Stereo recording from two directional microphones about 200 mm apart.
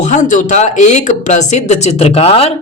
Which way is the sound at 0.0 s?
40° left (ahead or behind).